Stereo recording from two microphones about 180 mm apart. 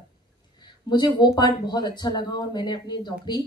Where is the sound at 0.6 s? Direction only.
25° left (ahead or behind).